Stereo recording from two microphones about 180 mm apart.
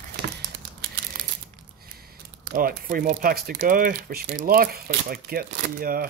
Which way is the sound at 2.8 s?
55° right (ahead or behind).